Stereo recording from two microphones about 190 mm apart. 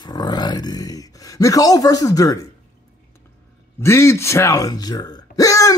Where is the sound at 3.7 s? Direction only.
15° left (ahead or behind).